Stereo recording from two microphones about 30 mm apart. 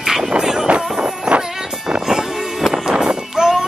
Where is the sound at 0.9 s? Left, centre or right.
Right.